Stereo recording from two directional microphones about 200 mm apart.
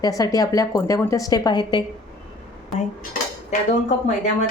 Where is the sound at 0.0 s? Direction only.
20° left (ahead or behind).